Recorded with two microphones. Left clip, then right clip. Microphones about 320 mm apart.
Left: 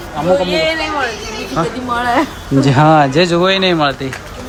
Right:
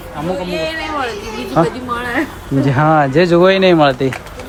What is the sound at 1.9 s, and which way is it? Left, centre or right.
Speech, centre.